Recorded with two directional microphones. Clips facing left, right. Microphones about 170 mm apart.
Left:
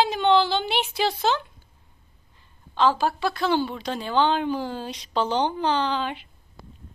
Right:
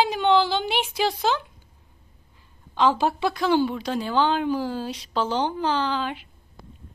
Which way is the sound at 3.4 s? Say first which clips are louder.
Right 3 dB; 10° right (ahead or behind).